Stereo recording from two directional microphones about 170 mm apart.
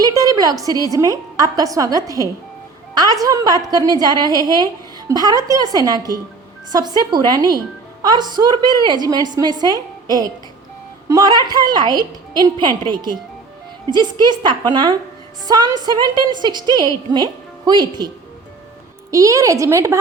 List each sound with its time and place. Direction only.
0.0 s a sound: 20° right (ahead or behind)
0.8 s a woman's voice: 20° right (ahead or behind)
19.1 s a woman's voice: 20° right (ahead or behind)